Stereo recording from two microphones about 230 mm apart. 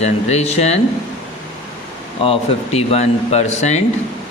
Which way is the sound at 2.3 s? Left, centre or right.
Left.